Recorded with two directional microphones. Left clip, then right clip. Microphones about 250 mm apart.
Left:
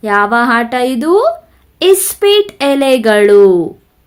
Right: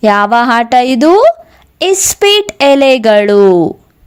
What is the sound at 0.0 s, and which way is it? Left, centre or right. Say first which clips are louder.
A woman's voice: right 3 dB; right.